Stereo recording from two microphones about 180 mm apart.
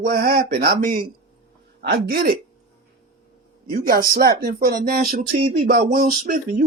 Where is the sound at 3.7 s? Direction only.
55° right (ahead or behind).